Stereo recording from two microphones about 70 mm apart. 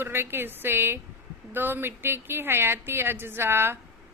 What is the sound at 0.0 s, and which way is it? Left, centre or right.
Speech, right.